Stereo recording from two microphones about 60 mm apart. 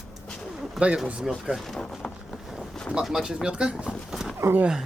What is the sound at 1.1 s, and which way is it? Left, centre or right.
Speech, centre.